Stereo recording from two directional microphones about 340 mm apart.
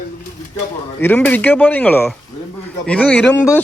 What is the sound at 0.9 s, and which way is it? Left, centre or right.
A man's voice, centre.